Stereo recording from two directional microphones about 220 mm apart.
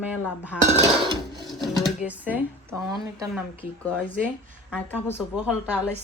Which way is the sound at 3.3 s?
5° left (ahead or behind).